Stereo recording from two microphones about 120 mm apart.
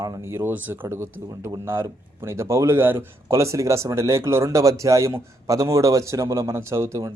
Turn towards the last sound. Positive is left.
turn(degrees=-25)  # may be behind; listen again after turning